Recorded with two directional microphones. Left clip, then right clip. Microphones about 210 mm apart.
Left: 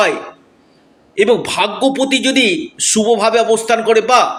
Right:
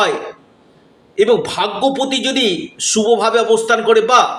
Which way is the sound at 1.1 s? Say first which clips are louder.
Left 1 dB; 30° left (ahead or behind).